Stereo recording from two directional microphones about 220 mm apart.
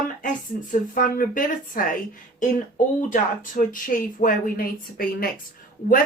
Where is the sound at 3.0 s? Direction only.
35° left (ahead or behind).